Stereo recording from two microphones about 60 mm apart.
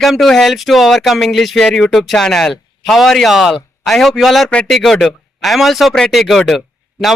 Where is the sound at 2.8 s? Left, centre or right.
Centre.